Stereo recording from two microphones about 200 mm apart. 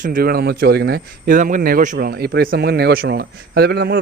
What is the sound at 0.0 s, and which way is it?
Speech, 45° right (ahead or behind).